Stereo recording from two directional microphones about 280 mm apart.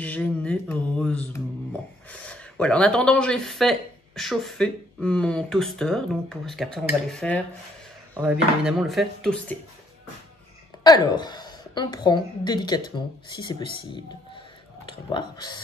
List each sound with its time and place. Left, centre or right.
0.0 s mantra: centre
2.0 s speech: centre
10.8 s a woman's voice: centre